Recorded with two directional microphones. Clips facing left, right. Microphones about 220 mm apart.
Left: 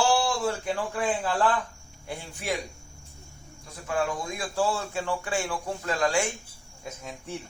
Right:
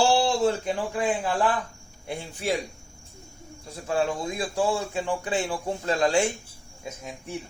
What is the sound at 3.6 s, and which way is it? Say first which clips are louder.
Speech: right 3 dB; 30° right (ahead or behind).